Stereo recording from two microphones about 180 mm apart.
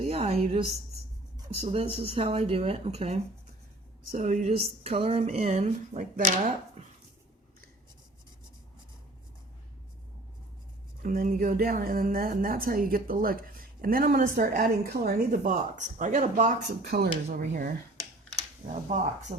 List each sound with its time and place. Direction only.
0.0 s a woman's voice: 35° right (ahead or behind)
11.0 s speech: 50° right (ahead or behind)
16.8 s speech: 65° right (ahead or behind)
17.3 s speech: 50° right (ahead or behind)
19.3 s speech: 45° right (ahead or behind)